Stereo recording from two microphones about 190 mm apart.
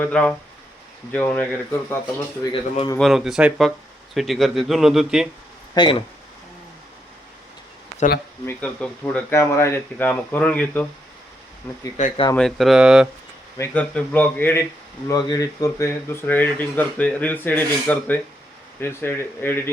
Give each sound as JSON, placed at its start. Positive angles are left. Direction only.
{"t": 0.0, "sound": "speech", "side_deg": 5}
{"t": 2.4, "sound": "a man's voice", "side_deg": 25}
{"t": 3.0, "sound": "speech", "side_deg": 0}
{"t": 5.7, "sound": "speech", "side_deg": 25}
{"t": 8.4, "sound": "speech", "side_deg": 5}
{"t": 11.9, "sound": "speech", "side_deg": 40}
{"t": 12.4, "sound": "speech", "side_deg": 0}
{"t": 13.6, "sound": "speech", "side_deg": 10}